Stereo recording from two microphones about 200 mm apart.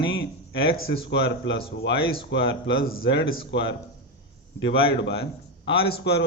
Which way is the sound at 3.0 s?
60° left (ahead or behind).